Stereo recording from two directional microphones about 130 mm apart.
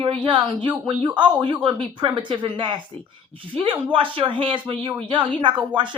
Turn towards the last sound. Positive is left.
turn(degrees=-35)  # may be behind; listen again after turning